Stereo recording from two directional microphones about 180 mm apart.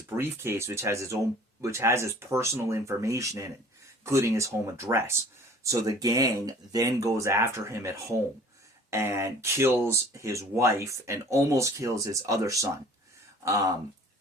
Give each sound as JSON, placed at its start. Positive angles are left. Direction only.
{"t": 0.1, "sound": "speech", "side_deg": -15}